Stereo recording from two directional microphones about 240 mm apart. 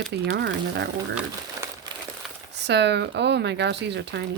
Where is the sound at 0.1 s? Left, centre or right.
Right.